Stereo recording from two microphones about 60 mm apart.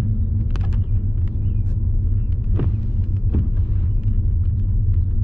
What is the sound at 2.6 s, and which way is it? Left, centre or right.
Vehicle, right.